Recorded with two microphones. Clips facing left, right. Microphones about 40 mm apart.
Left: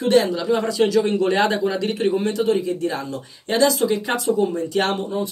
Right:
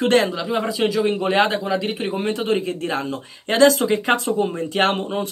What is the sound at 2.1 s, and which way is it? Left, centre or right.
Speech, right.